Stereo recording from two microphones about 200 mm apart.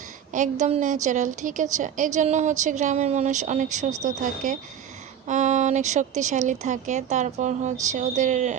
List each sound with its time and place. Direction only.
0.3 s speech: 40° right (ahead or behind)